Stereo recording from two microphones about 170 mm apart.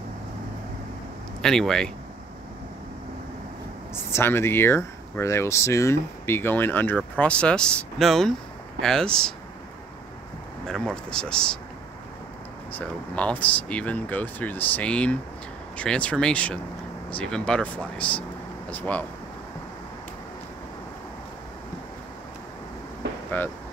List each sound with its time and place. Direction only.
1.4 s speech: 5° left (ahead or behind)
4.1 s speech: 15° left (ahead or behind)
10.7 s speech: 5° left (ahead or behind)
12.7 s speech: 10° left (ahead or behind)
23.0 s vehicle: 80° right